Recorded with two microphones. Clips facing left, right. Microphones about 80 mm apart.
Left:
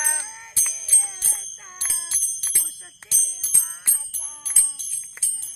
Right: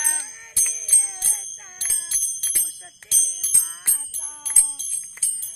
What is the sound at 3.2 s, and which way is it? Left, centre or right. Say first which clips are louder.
Music: right 2 dB; left.